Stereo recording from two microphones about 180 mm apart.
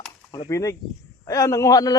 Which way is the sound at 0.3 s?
20° left (ahead or behind).